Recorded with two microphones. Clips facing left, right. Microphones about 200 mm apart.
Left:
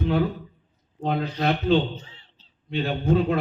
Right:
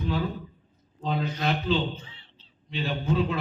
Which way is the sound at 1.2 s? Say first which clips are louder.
Left 3 dB; 35° left (ahead or behind).